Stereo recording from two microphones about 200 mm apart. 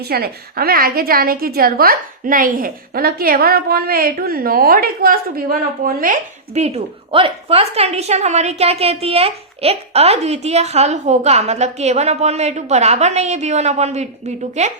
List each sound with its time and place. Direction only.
0.1 s a woman's voice: 50° right (ahead or behind)